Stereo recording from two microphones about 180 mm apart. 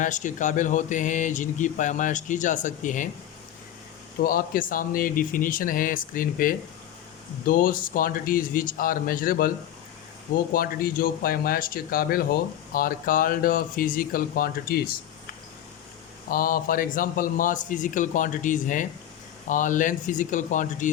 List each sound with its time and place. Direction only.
0.0 s speech: 45° left (ahead or behind)
4.2 s speech: 55° left (ahead or behind)
16.3 s speech: 50° left (ahead or behind)